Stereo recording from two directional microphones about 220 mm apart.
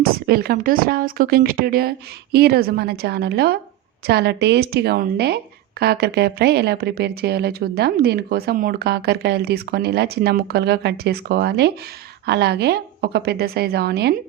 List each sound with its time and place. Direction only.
0.0 s a woman's voice: 45° right (ahead or behind)